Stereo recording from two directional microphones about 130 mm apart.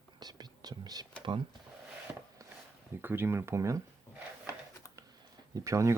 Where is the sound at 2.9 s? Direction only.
15° right (ahead or behind).